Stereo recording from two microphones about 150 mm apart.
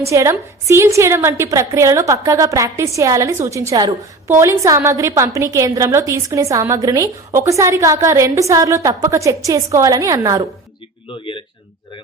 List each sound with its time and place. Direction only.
0.0 s a woman's voice: 20° right (ahead or behind)
11.1 s speech: 35° left (ahead or behind)